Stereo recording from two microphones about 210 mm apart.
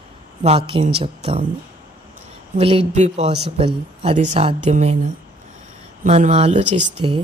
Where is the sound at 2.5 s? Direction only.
25° right (ahead or behind).